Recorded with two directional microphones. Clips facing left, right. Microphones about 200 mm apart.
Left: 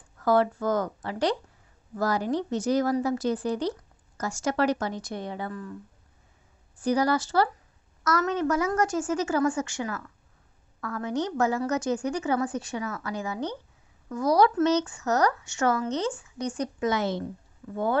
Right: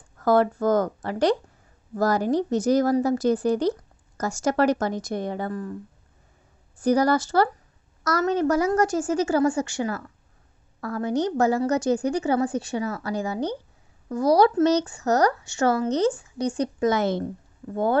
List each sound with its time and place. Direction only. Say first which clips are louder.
0.2 s a woman's voice: right 3 dB; 45° right (ahead or behind)
6.8 s a woman's voice: right 4 dB; 45° right (ahead or behind)
16.9 s a woman's voice: right 4 dB; 50° right (ahead or behind)
17.6 s speech: right 4 dB; 35° right (ahead or behind)